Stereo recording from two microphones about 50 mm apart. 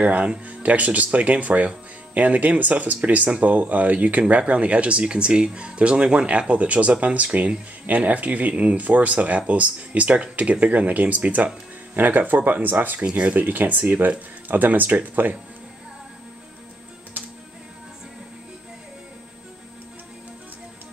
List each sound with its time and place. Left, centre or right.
0.0 s speech: right